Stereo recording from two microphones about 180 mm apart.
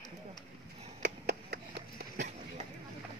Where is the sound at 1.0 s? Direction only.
65° right (ahead or behind).